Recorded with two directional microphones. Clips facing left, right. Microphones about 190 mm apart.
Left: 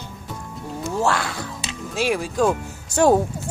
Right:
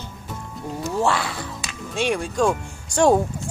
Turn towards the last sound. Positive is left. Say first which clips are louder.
# left 1 dB
turn(degrees=5)  # may be behind; listen again after turning